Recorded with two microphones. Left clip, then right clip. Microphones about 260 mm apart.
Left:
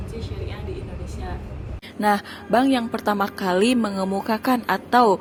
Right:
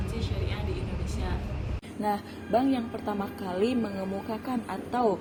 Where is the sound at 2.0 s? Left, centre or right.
Left.